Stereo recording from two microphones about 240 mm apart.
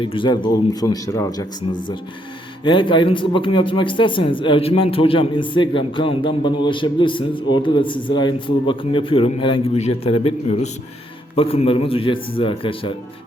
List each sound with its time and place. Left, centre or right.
0.0 s speech: left
2.6 s speech: centre